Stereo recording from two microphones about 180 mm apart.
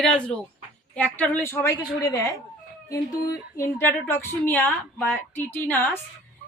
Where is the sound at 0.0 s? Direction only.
5° left (ahead or behind).